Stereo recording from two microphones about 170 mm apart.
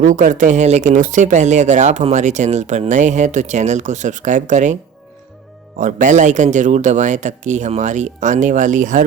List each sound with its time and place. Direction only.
0.0 s speech: 50° right (ahead or behind)
5.8 s speech: 45° right (ahead or behind)